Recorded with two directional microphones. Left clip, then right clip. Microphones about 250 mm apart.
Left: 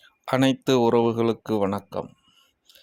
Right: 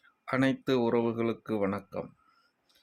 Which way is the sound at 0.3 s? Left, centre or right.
Left.